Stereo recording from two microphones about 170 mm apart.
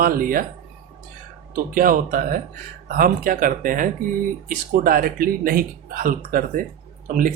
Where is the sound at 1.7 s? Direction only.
55° right (ahead or behind).